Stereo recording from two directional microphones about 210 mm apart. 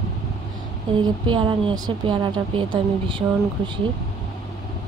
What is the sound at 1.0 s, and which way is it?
A woman's voice, 20° right (ahead or behind).